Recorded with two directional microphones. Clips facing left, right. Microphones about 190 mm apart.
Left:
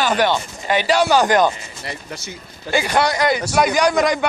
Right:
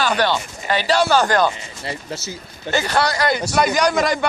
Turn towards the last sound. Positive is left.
turn(degrees=0)  # may be behind; listen again after turning